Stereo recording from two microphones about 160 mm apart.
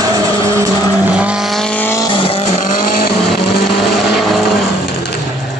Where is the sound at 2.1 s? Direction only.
35° left (ahead or behind).